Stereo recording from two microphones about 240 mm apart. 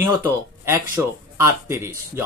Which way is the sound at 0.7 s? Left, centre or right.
Centre.